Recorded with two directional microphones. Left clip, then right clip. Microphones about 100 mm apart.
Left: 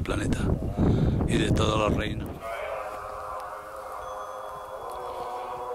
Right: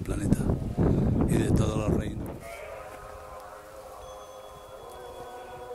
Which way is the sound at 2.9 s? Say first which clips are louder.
Left 8 dB; 35° left (ahead or behind).